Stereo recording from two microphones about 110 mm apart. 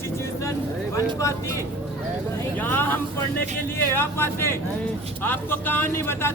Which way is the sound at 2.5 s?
20° left (ahead or behind).